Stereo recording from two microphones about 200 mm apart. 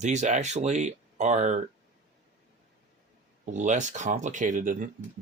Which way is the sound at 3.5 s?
35° right (ahead or behind).